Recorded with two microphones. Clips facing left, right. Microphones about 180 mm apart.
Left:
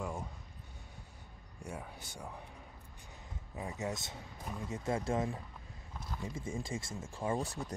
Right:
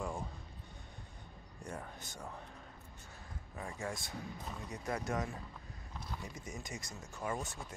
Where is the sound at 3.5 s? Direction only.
20° left (ahead or behind).